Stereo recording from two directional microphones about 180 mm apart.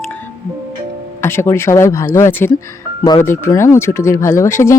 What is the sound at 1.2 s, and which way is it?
Speech, 15° left (ahead or behind).